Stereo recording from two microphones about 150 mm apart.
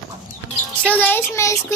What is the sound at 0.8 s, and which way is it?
Speech, 10° left (ahead or behind).